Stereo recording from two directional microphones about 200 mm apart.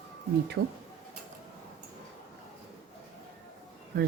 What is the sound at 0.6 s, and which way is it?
Speech, 55° right (ahead or behind).